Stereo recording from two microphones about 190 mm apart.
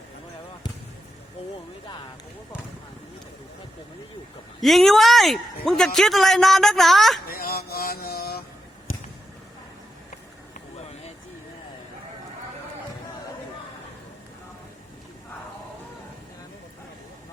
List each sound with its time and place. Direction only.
4.6 s speech: centre (ahead or behind)
7.3 s mantra: 55° left (ahead or behind)